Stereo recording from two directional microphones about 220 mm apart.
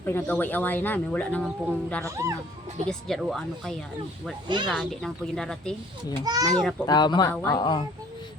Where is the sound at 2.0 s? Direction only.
15° right (ahead or behind).